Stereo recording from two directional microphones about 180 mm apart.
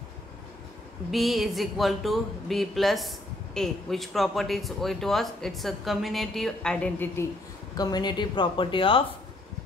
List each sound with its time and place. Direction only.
1.1 s speech: centre (ahead or behind)
7.7 s speech: 20° left (ahead or behind)